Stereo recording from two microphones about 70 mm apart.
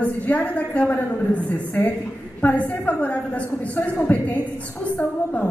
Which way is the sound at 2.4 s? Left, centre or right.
Left.